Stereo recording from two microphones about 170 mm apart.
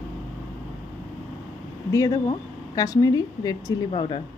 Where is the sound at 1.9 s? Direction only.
20° left (ahead or behind).